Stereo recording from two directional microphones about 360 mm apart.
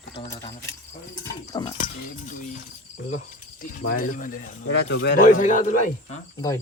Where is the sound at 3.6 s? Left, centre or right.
Left.